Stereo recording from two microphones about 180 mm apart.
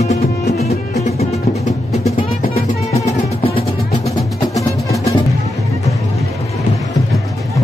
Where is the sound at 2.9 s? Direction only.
35° left (ahead or behind).